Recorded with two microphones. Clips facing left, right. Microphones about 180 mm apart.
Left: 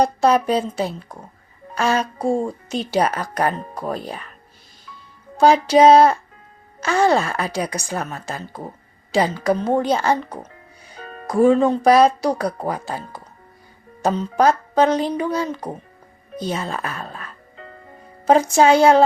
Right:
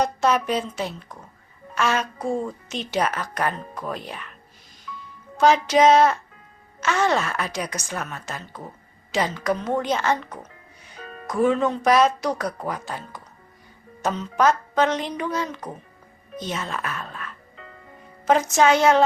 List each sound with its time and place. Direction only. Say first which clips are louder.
0.0 s a woman's voice: left 5 dB; 35° left (ahead or behind)
4.9 s music: right 5 dB; 35° left (ahead or behind)
5.4 s a woman's voice: left 4 dB; 35° left (ahead or behind)
16.3 s music: left 4 dB; 35° left (ahead or behind)
18.3 s a woman's voice: left 4 dB; 30° left (ahead or behind)